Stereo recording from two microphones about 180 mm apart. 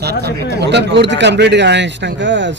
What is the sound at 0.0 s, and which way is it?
Speech, 65° right (ahead or behind).